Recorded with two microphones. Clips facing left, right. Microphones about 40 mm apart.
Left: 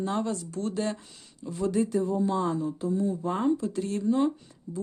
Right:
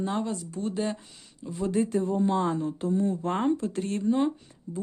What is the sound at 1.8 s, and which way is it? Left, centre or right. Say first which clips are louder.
Speech: right 1 dB; right.